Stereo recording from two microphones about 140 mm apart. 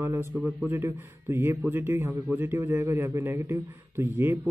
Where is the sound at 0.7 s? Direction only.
15° right (ahead or behind).